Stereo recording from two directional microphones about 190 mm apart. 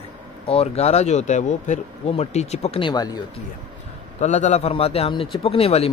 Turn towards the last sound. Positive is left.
turn(degrees=30)  # may be behind; listen again after turning